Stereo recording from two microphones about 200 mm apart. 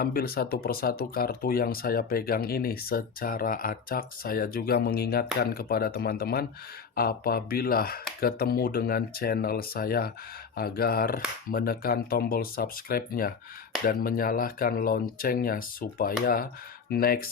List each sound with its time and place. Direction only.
0.0 s speech: 45° left (ahead or behind)